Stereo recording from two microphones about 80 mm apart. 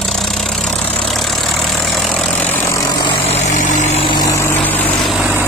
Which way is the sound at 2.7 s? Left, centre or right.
Left.